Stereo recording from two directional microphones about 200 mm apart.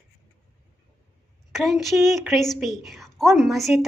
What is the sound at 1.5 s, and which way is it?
A woman's voice, centre (ahead or behind).